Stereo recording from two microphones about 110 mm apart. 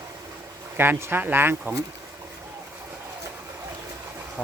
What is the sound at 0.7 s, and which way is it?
Speech, 20° right (ahead or behind).